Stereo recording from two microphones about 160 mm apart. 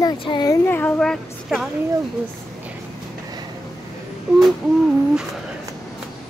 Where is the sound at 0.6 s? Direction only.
10° left (ahead or behind).